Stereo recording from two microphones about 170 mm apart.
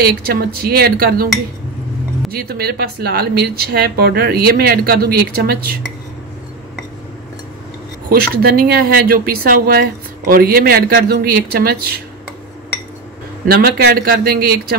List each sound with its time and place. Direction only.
0.0 s speech: 60° right (ahead or behind)
2.3 s speech: 65° right (ahead or behind)
8.1 s speech: 60° right (ahead or behind)
13.5 s speech: 70° right (ahead or behind)